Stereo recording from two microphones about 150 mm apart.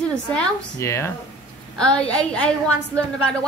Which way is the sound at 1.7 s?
5° left (ahead or behind).